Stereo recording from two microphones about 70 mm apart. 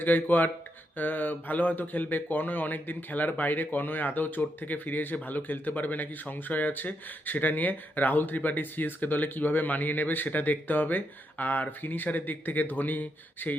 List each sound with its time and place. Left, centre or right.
0.0 s speech: left